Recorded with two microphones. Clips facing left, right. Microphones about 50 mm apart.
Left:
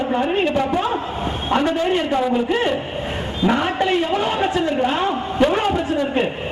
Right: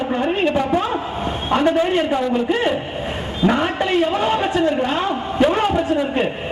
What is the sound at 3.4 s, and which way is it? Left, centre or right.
A man's voice, centre.